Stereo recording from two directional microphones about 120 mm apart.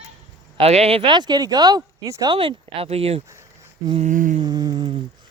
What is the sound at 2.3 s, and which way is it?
Speech, 50° right (ahead or behind).